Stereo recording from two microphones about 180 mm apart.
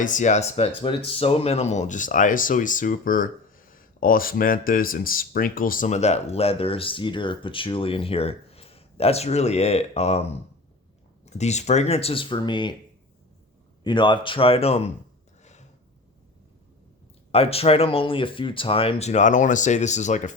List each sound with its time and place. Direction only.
0.0 s speech: 45° left (ahead or behind); by 12.7 s 25° left (ahead or behind)
13.8 s speech: 25° left (ahead or behind)
17.3 s speech: 35° left (ahead or behind)